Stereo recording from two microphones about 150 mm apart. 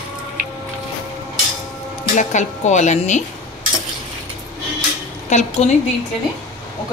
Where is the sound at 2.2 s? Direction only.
50° left (ahead or behind).